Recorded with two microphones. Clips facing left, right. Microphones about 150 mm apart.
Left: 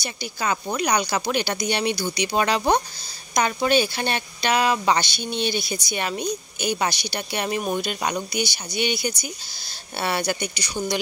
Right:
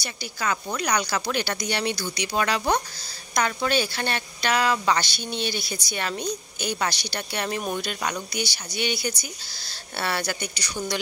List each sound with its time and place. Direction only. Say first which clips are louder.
0.0 s a woman's voice: left 2 dB; 20° left (ahead or behind)